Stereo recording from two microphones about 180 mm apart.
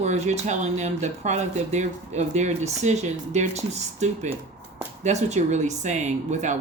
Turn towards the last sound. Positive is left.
turn(degrees=-40)  # may be behind; listen again after turning